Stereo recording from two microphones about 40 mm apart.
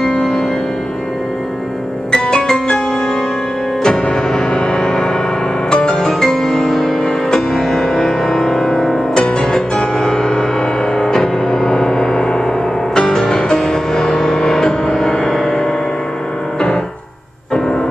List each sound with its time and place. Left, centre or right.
0.1 s music: centre
2.2 s music: centre
3.8 s music: centre